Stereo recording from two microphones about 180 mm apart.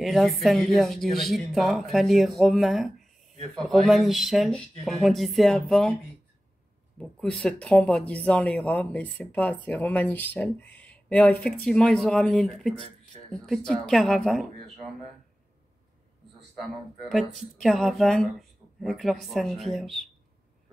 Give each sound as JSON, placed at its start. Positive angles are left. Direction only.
{"t": 0.0, "sound": "speech", "side_deg": 0}
{"t": 7.0, "sound": "speech", "side_deg": 5}
{"t": 17.6, "sound": "speech", "side_deg": 0}